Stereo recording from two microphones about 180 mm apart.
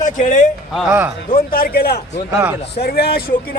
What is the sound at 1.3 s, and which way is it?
Speech, 55° left (ahead or behind).